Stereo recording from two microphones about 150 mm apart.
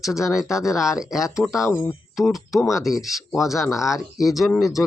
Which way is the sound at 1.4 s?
15° left (ahead or behind).